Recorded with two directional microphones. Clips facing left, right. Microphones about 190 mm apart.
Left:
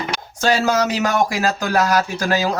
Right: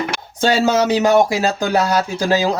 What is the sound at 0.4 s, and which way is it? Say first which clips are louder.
Speech: right 3 dB; 25° right (ahead or behind).